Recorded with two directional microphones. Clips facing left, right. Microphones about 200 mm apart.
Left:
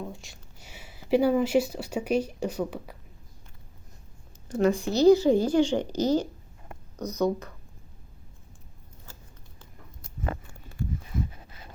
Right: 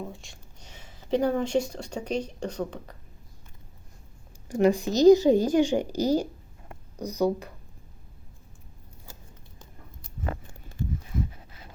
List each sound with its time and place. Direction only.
0.1 s speech: centre (ahead or behind)
4.4 s speech: 15° right (ahead or behind)
7.0 s speech: 35° right (ahead or behind)
7.3 s speech: 10° right (ahead or behind)